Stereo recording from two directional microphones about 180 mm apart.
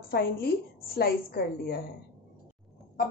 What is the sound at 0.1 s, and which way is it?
A woman's voice, 60° left (ahead or behind).